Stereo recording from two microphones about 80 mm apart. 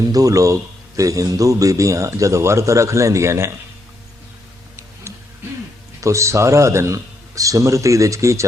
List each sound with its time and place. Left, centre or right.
0.0 s a man's voice: right
5.1 s a sound: right
6.0 s a man's voice: right